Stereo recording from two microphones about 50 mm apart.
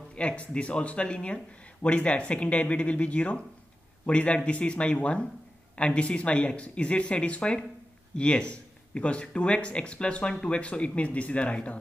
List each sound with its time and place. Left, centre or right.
0.1 s a man's voice: left